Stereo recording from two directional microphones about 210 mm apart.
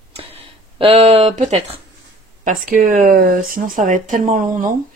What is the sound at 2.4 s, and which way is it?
Speech, 40° right (ahead or behind).